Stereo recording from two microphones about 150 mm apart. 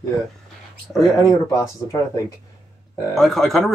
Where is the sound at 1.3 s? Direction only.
25° left (ahead or behind).